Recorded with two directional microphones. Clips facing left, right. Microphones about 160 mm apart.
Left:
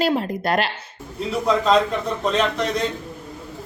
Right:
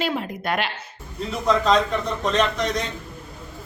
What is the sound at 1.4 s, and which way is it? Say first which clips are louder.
A man's voice: left 1 dB; 5° left (ahead or behind).